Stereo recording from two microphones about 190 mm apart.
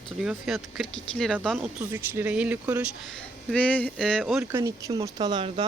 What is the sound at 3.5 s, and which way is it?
Speech, 5° left (ahead or behind).